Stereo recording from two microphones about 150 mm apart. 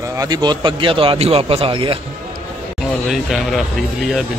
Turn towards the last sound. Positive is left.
turn(degrees=0)  # may be behind; listen again after turning